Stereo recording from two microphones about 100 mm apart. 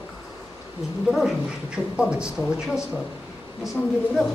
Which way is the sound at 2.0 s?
10° right (ahead or behind).